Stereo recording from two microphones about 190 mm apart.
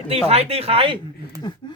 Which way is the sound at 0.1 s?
30° right (ahead or behind).